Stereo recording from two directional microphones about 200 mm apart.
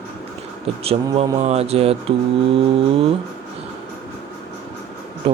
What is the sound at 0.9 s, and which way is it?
Speech, 30° right (ahead or behind).